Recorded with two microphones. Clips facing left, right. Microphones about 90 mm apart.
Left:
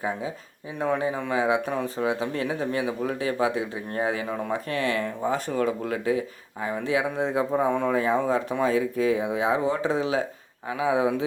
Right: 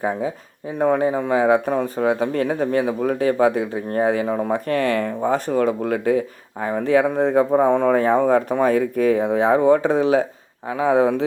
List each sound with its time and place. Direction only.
0.8 s speech: 40° right (ahead or behind)
10.8 s a man's voice: 55° right (ahead or behind)